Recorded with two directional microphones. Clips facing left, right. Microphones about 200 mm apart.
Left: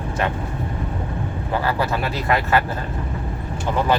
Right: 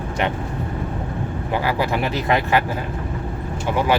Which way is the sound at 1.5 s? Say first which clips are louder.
Right 1 dB; 15° right (ahead or behind).